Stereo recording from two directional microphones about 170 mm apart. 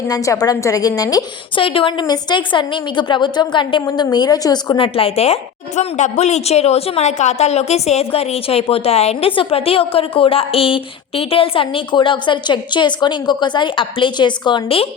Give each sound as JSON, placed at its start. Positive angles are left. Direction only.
{"t": 0.1, "sound": "a woman's voice", "side_deg": 20}